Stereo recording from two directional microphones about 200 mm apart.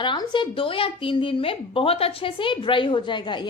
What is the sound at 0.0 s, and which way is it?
A woman's voice, 25° left (ahead or behind).